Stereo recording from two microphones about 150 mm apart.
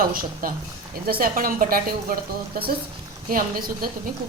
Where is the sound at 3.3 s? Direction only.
75° right (ahead or behind).